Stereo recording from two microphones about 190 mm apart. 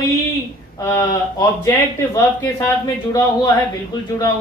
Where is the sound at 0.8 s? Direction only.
15° left (ahead or behind).